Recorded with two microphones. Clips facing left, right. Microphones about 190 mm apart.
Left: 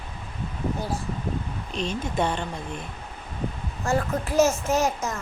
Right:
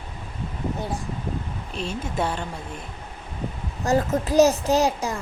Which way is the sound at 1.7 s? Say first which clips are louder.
Left 1 dB; 10° right (ahead or behind).